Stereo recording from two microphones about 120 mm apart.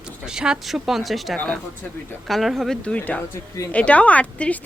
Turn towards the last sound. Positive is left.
turn(degrees=10)  # may be behind; listen again after turning